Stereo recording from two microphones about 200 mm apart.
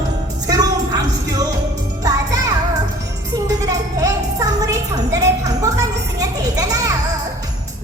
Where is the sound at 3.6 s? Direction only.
15° right (ahead or behind).